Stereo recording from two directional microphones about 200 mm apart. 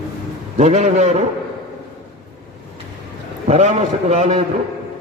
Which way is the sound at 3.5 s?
35° right (ahead or behind).